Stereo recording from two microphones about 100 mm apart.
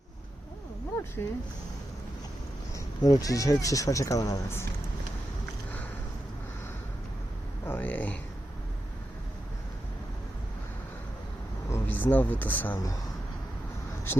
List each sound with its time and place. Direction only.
1.2 s speech: 30° left (ahead or behind)
2.7 s speech: 40° left (ahead or behind)
7.6 s speech: 20° left (ahead or behind)
11.7 s speech: 20° left (ahead or behind)